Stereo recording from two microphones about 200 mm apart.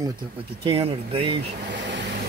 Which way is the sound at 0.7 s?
30° right (ahead or behind).